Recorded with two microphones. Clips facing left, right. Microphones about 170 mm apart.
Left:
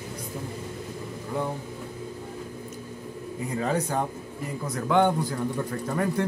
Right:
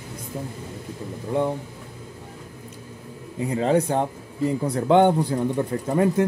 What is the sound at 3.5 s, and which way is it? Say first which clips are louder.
Speech: right 6 dB; 25° right (ahead or behind).